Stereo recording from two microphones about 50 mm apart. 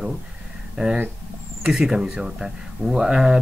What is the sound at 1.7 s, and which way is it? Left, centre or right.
Speech, centre.